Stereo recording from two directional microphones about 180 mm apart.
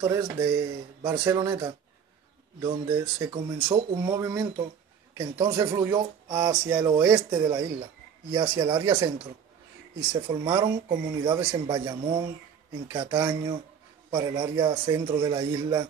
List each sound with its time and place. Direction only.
0.0 s speech: 15° right (ahead or behind)
10.4 s speech: 25° right (ahead or behind)